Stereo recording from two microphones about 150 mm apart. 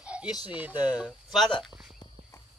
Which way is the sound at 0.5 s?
10° right (ahead or behind).